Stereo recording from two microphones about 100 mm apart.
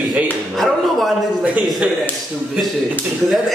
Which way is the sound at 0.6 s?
Centre (ahead or behind).